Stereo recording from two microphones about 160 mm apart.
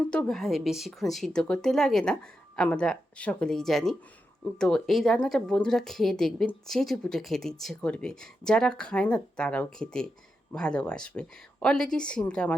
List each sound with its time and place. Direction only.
0.1 s a woman's voice: 5° left (ahead or behind)